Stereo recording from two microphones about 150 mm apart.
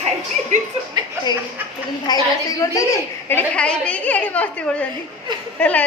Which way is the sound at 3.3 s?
10° left (ahead or behind).